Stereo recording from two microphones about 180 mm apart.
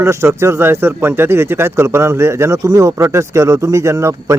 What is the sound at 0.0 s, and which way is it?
Speech, 15° right (ahead or behind).